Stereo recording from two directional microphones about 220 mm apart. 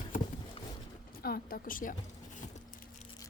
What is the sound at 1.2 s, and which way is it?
Speech, 40° left (ahead or behind).